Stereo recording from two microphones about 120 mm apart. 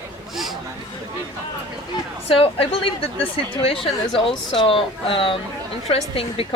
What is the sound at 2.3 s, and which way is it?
Speech, 50° left (ahead or behind).